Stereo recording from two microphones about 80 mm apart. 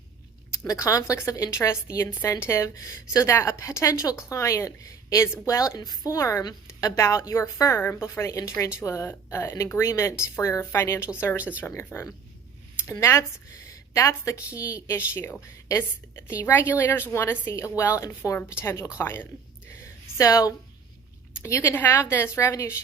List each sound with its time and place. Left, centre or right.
0.7 s a woman's voice: left
12.9 s a woman's voice: left
15.1 s a woman's voice: left
19.7 s a sound: left
21.4 s a woman's voice: left